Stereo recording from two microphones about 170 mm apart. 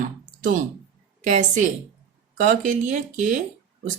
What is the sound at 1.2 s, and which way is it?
A woman's voice, 50° right (ahead or behind).